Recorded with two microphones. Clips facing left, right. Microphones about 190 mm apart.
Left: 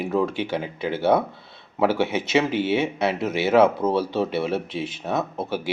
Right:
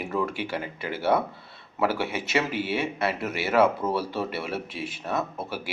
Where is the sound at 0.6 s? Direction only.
5° right (ahead or behind).